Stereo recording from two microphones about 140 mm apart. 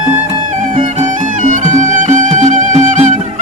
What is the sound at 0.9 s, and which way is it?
Music, 60° right (ahead or behind).